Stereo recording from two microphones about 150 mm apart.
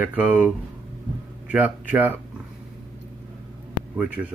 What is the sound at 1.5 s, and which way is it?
Speech, 10° right (ahead or behind).